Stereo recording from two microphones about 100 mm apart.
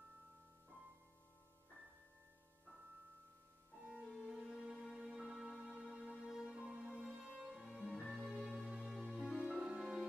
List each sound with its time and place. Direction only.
4.1 s music: centre (ahead or behind)